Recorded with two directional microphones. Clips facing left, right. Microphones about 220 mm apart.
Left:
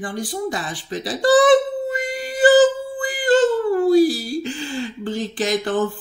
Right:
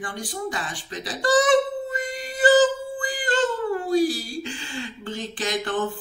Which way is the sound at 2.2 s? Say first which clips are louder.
Left 4 dB; 35° left (ahead or behind).